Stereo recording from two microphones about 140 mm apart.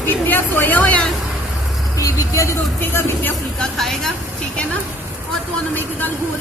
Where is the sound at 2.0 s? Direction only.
25° left (ahead or behind).